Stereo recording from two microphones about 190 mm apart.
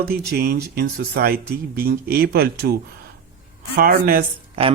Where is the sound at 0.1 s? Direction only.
55° right (ahead or behind).